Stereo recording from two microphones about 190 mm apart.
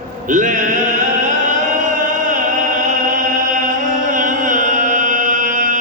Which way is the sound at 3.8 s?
45° right (ahead or behind).